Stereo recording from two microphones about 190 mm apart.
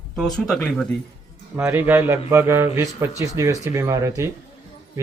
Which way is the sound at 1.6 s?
10° right (ahead or behind).